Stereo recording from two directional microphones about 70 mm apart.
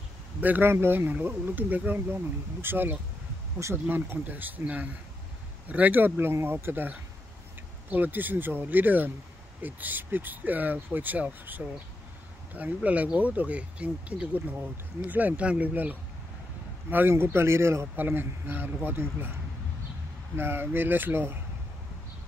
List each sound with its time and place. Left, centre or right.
0.4 s speech: right
17.1 s speech: right
20.3 s speech: right